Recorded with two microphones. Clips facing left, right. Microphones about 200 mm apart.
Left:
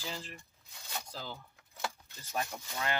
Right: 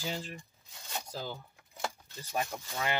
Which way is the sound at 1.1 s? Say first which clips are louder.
Right 4 dB; 15° right (ahead or behind).